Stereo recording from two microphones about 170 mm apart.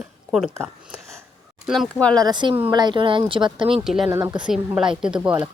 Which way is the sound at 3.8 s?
Centre (ahead or behind).